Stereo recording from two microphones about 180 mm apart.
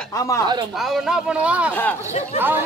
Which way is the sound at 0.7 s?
Centre (ahead or behind).